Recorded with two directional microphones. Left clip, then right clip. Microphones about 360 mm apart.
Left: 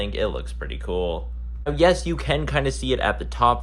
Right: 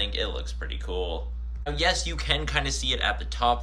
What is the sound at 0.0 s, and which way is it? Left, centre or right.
Speech, centre.